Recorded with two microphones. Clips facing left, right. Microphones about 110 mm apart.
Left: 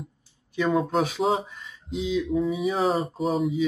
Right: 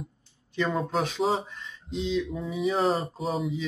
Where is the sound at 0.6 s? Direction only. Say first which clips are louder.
Left 4 dB; 5° left (ahead or behind).